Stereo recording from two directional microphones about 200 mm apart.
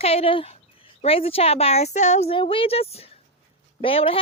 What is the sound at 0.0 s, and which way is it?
A woman's voice, 30° left (ahead or behind).